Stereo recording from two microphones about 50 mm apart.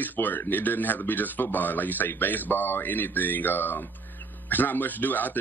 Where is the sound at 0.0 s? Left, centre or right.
Left.